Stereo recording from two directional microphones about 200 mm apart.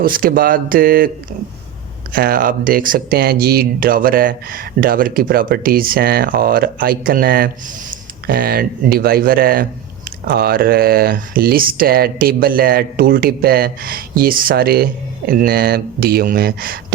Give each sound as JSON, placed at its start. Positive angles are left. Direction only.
{"t": 0.0, "sound": "speech", "side_deg": -45}
{"t": 2.1, "sound": "speech", "side_deg": -45}